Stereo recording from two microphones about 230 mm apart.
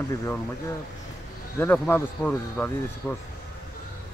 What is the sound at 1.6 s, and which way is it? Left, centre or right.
Speech, centre.